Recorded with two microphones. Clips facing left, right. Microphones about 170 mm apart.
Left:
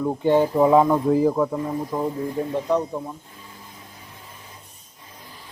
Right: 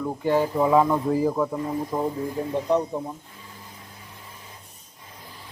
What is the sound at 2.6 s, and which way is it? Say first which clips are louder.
Speech: right 1 dB; 15° right (ahead or behind).